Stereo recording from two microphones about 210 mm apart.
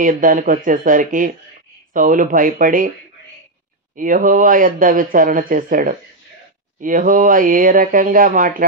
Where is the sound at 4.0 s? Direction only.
40° right (ahead or behind).